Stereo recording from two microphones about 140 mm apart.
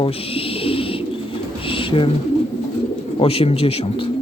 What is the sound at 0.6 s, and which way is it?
Bird, 40° left (ahead or behind).